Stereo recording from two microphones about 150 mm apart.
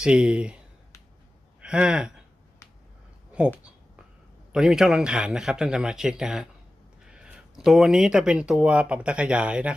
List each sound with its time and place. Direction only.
0.0 s speech: 5° right (ahead or behind)
1.6 s speech: 5° right (ahead or behind)
4.5 s speech: 5° right (ahead or behind)